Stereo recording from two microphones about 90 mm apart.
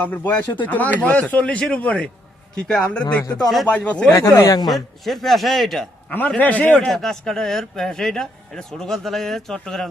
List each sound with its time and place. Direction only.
0.0 s speech: 20° left (ahead or behind)
4.1 s speech: 35° left (ahead or behind)
4.7 s speech: centre (ahead or behind)
6.1 s speech: 15° left (ahead or behind)
6.8 s speech: 5° left (ahead or behind)